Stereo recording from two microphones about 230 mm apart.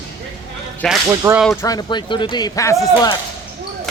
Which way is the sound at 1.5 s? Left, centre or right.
Centre.